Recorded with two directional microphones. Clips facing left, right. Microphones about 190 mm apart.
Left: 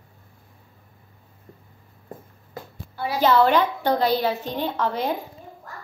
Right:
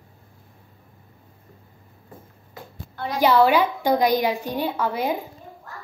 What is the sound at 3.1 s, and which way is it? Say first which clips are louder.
A woman's voice: right 1 dB; 10° right (ahead or behind).